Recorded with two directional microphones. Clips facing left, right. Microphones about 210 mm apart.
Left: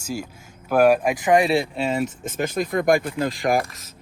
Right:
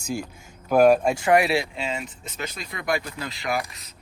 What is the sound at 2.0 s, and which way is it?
Speech, 45° left (ahead or behind).